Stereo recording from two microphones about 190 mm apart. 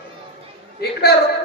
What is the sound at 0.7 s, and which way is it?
Speech, 55° left (ahead or behind).